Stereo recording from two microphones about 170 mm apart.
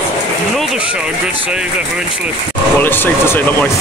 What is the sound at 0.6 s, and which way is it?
Run, 5° right (ahead or behind).